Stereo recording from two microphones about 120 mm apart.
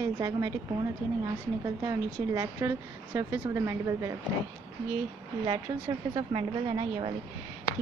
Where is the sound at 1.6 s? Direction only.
30° right (ahead or behind).